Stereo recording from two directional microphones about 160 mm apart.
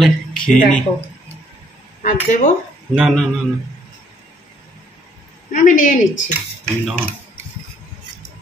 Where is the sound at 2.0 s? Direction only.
55° left (ahead or behind).